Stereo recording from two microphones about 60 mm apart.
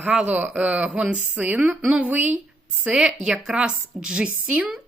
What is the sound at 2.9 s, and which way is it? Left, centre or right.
A woman's voice, centre.